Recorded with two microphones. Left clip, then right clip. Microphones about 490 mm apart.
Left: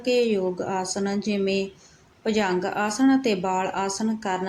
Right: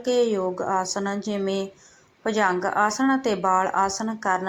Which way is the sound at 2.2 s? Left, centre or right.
Left.